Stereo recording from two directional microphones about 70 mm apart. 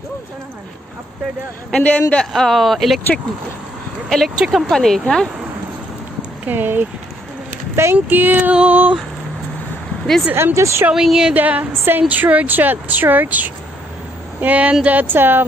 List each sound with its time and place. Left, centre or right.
1.7 s a man's voice: centre
2.3 s speech: centre
4.4 s speech: centre
4.6 s speech: centre
6.4 s a woman's voice: right
10.3 s speech: right
10.9 s a woman's voice: centre
11.3 s a woman's voice: right